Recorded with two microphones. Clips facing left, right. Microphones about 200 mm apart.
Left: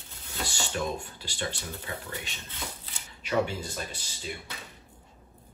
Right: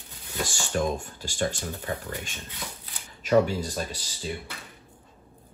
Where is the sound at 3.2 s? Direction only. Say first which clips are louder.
Right 7 dB; 40° right (ahead or behind).